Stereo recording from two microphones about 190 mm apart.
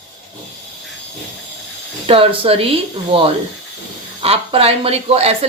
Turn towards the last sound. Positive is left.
turn(degrees=-35)  # may be behind; listen again after turning